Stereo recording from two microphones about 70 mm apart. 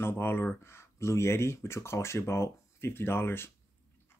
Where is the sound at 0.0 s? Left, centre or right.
Left.